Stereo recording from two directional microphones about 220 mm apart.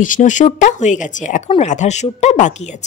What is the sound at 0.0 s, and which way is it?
Speech, 35° left (ahead or behind).